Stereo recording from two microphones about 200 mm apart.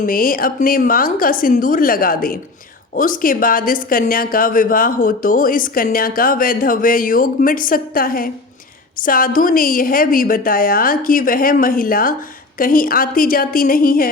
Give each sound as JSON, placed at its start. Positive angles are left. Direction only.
{"t": 0.0, "sound": "speech", "side_deg": 45}